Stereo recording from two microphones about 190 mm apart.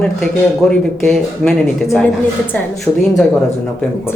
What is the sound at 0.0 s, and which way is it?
A man's voice, 5° left (ahead or behind).